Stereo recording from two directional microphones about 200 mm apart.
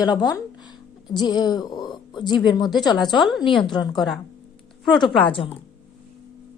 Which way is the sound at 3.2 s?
Centre (ahead or behind).